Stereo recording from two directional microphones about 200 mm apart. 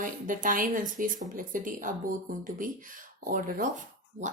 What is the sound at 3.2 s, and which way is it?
Speech, 45° right (ahead or behind).